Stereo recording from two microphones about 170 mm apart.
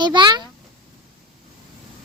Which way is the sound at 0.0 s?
25° right (ahead or behind).